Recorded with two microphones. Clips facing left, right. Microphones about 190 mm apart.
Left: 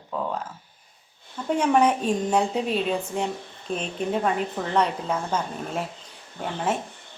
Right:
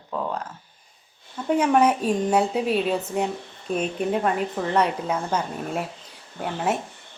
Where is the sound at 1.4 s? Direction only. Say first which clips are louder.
Right 1 dB; 5° right (ahead or behind).